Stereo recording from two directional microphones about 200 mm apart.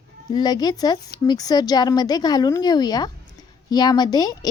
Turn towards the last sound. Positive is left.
turn(degrees=20)  # may be behind; listen again after turning